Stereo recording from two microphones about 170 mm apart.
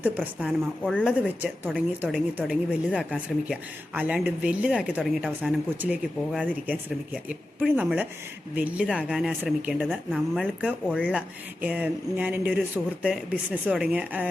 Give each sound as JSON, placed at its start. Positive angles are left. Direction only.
{"t": 0.0, "sound": "speech", "side_deg": -10}